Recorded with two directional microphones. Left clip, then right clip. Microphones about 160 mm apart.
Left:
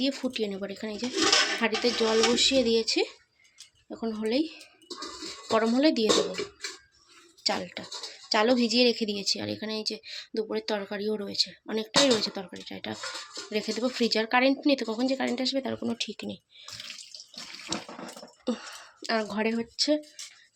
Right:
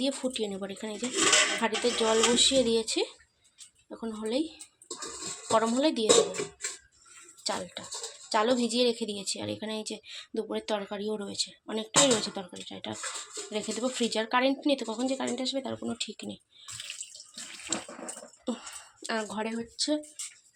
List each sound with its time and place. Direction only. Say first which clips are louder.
0.0 s speech: left 1 dB; 15° left (ahead or behind)
3.8 s speech: left 4 dB; 25° left (ahead or behind)
7.4 s speech: left 4 dB; 20° left (ahead or behind)
18.5 s speech: left 4 dB; 20° left (ahead or behind)
19.4 s speech: left 5 dB; 40° left (ahead or behind)